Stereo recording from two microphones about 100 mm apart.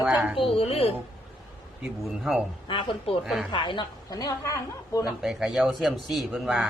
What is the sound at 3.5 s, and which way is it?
A woman's voice, 55° left (ahead or behind).